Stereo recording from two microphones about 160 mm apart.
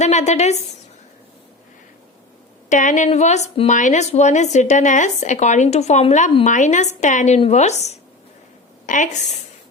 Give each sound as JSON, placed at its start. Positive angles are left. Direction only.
{"t": 0.0, "sound": "speech", "side_deg": 45}
{"t": 2.6, "sound": "speech", "side_deg": 50}
{"t": 3.7, "sound": "speech", "side_deg": 50}